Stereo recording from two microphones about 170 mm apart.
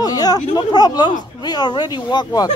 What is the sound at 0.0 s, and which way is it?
Speech, 20° left (ahead or behind).